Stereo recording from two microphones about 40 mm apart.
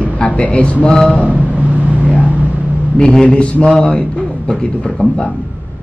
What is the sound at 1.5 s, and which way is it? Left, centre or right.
Vehicle, right.